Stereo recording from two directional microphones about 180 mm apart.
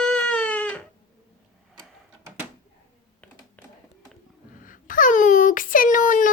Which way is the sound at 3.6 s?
10° left (ahead or behind).